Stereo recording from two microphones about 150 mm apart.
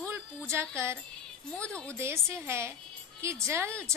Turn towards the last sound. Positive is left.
turn(degrees=-20)  # may be behind; listen again after turning